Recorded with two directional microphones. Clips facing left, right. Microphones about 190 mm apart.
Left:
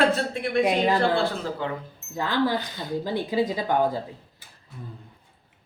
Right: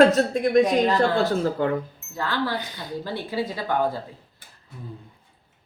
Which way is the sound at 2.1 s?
15° left (ahead or behind).